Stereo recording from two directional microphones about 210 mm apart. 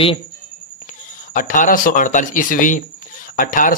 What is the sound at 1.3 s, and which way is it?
Speech, 40° left (ahead or behind).